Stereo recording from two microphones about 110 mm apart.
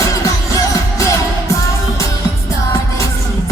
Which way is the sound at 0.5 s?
30° left (ahead or behind).